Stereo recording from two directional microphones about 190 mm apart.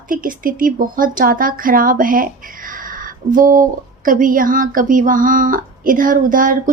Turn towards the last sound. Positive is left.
turn(degrees=-45)  # may be behind; listen again after turning